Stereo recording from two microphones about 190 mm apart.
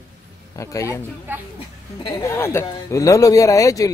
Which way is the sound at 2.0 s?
20° left (ahead or behind).